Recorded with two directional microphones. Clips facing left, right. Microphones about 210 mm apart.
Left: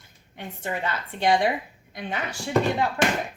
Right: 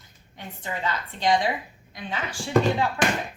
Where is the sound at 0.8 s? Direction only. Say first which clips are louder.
Even; 60° left (ahead or behind).